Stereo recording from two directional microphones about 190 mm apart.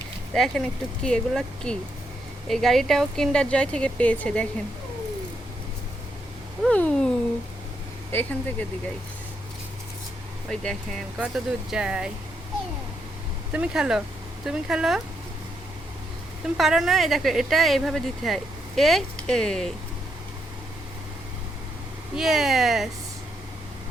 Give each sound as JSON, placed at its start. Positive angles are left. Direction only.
{"t": 0.3, "sound": "speech", "side_deg": 0}
{"t": 6.7, "sound": "a sound", "side_deg": 5}
{"t": 8.1, "sound": "speech", "side_deg": 10}
{"t": 10.5, "sound": "speech", "side_deg": 5}
{"t": 13.5, "sound": "speech", "side_deg": -5}
{"t": 16.6, "sound": "speech", "side_deg": 0}
{"t": 22.1, "sound": "speech", "side_deg": 0}